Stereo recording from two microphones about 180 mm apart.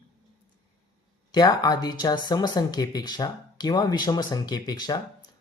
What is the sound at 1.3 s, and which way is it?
Speech, 20° left (ahead or behind).